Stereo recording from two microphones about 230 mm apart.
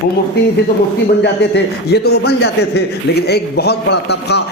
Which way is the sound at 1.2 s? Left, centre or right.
Left.